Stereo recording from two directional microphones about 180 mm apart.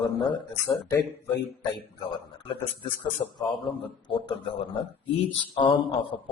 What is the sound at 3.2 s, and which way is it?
A man's voice, 20° left (ahead or behind).